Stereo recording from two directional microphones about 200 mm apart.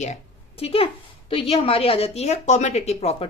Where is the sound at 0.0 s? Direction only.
30° left (ahead or behind).